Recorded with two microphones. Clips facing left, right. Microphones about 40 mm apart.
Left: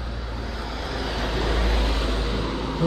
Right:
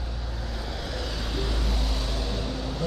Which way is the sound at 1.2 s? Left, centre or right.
Left.